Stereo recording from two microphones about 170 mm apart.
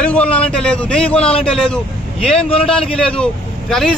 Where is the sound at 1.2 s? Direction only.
35° left (ahead or behind).